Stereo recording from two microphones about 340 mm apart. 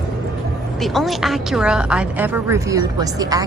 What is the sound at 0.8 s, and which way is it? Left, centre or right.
A woman's voice, centre.